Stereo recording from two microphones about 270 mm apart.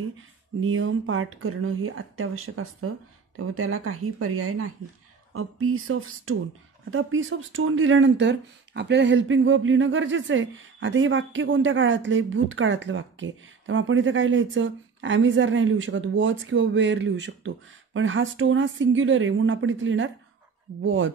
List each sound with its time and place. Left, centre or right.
0.6 s speech: right